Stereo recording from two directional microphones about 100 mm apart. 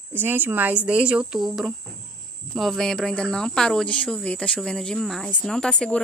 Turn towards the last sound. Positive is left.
turn(degrees=10)  # may be behind; listen again after turning